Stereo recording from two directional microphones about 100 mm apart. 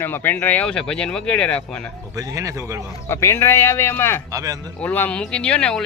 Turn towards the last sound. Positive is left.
turn(degrees=10)  # may be behind; listen again after turning